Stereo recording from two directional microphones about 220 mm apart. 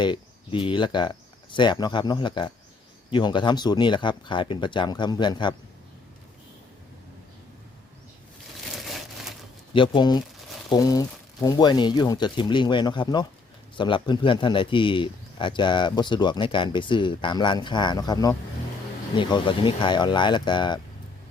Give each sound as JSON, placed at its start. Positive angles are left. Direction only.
{"t": 0.0, "sound": "a man's voice", "side_deg": 20}
{"t": 8.7, "sound": "a sound", "side_deg": 0}
{"t": 9.7, "sound": "a man's voice", "side_deg": 20}